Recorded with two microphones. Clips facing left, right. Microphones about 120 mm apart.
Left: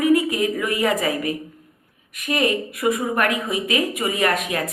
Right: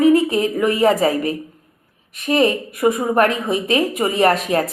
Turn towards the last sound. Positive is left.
turn(degrees=-35)  # may be behind; listen again after turning